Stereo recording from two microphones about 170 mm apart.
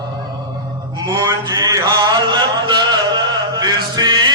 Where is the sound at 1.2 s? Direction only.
20° right (ahead or behind).